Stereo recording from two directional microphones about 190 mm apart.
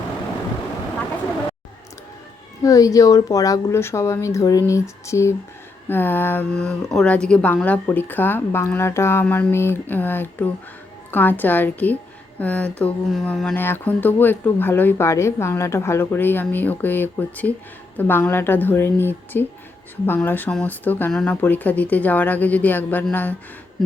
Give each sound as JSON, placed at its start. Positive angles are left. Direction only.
{"t": 2.6, "sound": "speech", "side_deg": 20}